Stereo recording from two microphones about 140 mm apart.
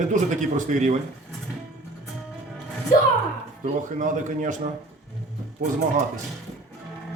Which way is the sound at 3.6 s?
65° right (ahead or behind).